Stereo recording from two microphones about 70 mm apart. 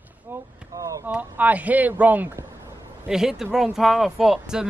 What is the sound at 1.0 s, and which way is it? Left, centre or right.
Speech, right.